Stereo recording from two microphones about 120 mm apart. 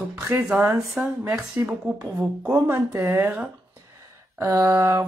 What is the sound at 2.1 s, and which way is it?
A woman's voice, 30° right (ahead or behind).